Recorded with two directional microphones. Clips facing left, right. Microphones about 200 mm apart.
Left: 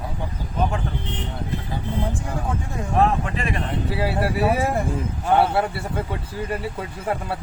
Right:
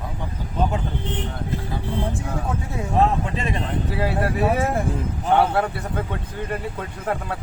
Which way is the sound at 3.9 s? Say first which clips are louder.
Even; 5° left (ahead or behind).